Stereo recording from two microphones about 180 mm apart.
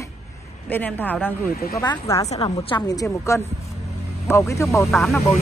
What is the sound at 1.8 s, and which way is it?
Speech, 20° left (ahead or behind).